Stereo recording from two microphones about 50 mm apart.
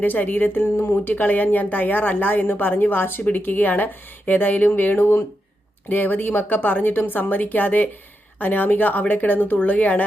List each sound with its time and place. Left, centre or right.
0.0 s speech: left